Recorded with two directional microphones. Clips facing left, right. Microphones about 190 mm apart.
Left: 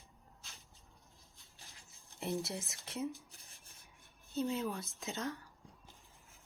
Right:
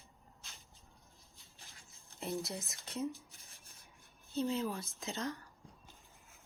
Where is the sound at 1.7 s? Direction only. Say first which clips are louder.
Even; centre (ahead or behind).